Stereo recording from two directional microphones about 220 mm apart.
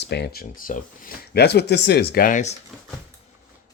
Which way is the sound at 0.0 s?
50° left (ahead or behind).